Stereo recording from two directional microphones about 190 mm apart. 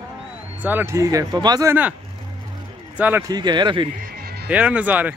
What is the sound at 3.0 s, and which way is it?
Speech, 10° right (ahead or behind).